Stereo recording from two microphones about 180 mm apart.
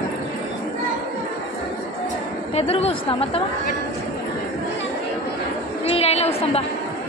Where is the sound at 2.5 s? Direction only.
35° left (ahead or behind).